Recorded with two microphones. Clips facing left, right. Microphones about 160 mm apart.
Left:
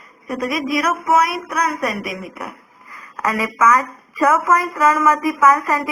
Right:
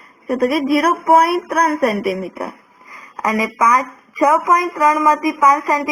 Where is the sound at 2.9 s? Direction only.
15° right (ahead or behind).